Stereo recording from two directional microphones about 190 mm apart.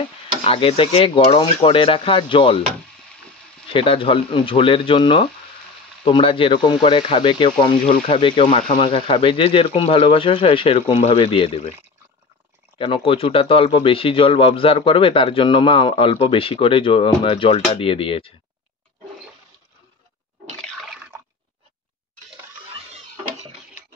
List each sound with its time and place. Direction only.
0.4 s speech: 30° left (ahead or behind)
3.7 s speech: 30° left (ahead or behind)
12.7 s speech: 25° left (ahead or behind)
20.5 s water: 5° left (ahead or behind)